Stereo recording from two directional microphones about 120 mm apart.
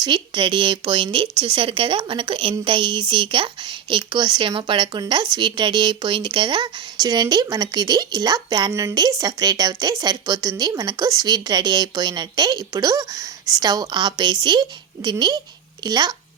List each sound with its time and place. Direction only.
0.0 s speech: 40° right (ahead or behind)